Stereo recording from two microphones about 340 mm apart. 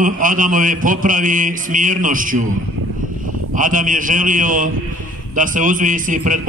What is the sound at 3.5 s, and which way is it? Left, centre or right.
A man's voice, right.